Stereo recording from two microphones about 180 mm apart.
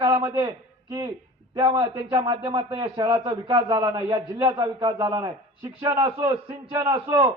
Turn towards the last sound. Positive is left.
turn(degrees=-15)  # may be behind; listen again after turning